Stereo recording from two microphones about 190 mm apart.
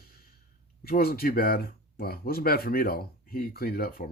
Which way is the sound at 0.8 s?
50° left (ahead or behind).